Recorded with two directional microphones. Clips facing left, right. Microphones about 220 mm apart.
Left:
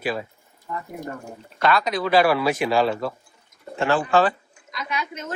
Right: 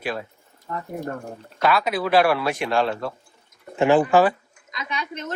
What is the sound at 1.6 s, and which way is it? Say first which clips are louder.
Speech: even; 5° right (ahead or behind).